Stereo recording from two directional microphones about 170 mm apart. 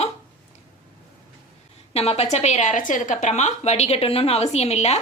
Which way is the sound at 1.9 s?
35° left (ahead or behind).